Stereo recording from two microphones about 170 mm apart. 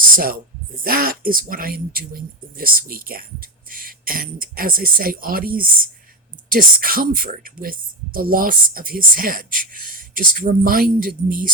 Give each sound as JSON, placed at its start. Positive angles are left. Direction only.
{"t": 0.9, "sound": "speech", "side_deg": -60}